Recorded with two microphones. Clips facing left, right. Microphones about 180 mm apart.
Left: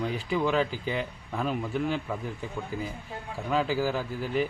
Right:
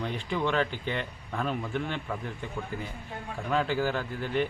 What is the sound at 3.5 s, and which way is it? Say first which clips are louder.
Speech: left 1 dB; 5° left (ahead or behind).